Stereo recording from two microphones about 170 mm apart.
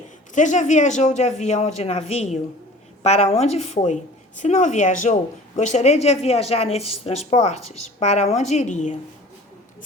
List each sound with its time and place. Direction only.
0.3 s speech: 45° left (ahead or behind)